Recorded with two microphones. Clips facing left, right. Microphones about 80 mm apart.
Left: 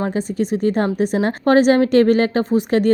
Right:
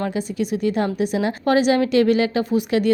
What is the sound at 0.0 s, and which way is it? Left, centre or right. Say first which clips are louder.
A woman's voice: left 3 dB; left.